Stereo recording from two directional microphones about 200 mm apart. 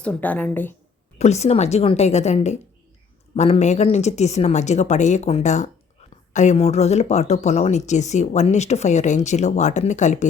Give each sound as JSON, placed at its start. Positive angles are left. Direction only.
{"t": 0.0, "sound": "a woman's voice", "side_deg": 5}
{"t": 1.2, "sound": "speech", "side_deg": 35}